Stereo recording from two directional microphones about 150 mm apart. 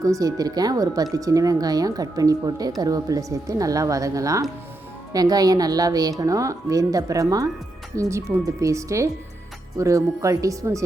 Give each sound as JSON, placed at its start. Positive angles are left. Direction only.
{"t": 0.0, "sound": "speech", "side_deg": -25}